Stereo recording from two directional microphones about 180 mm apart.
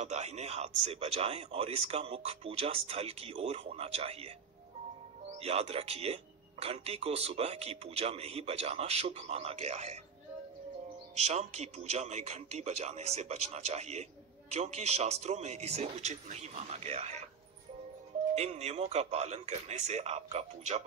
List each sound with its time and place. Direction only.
0.0 s speech: 40° right (ahead or behind)
5.4 s speech: 35° right (ahead or behind)
11.1 s speech: 35° right (ahead or behind)
18.3 s speech: 35° right (ahead or behind)